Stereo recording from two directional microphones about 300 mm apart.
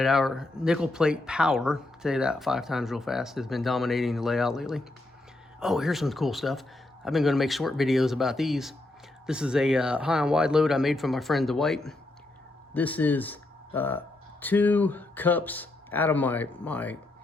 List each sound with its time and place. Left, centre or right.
0.0 s speech: centre